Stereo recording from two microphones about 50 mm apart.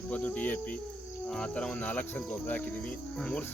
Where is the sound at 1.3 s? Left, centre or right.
Left.